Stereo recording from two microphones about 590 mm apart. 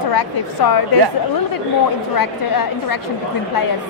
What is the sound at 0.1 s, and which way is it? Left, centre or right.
Speech, left.